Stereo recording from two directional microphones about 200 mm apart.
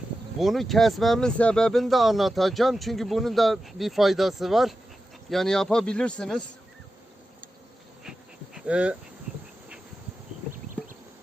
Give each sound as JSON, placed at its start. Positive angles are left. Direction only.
{"t": 0.3, "sound": "speech", "side_deg": 0}
{"t": 8.5, "sound": "speech", "side_deg": -5}
{"t": 10.5, "sound": "a sound", "side_deg": -40}